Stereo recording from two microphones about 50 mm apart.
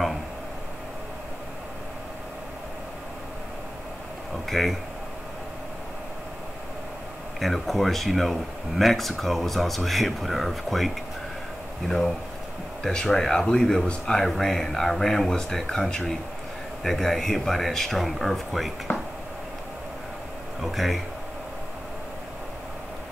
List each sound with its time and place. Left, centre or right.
4.5 s speech: centre
7.3 s speech: centre
12.8 s speech: centre
14.2 s speech: centre
18.9 s a sound: left
20.7 s speech: centre